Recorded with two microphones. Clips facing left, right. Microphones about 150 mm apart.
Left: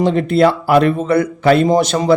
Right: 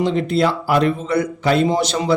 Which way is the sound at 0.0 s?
55° left (ahead or behind).